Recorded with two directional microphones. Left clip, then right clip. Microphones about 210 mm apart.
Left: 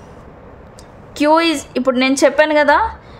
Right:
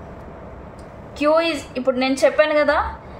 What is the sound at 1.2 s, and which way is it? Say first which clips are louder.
A woman's voice: left 4 dB; 55° left (ahead or behind).